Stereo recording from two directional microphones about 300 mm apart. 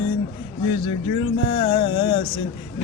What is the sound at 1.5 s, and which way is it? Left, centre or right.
Speech, centre.